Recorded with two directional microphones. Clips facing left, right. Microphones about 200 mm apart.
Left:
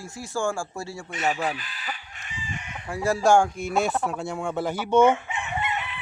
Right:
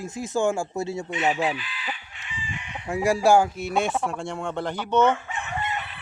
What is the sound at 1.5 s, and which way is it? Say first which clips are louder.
Chicken: right 2 dB; 45° left (ahead or behind).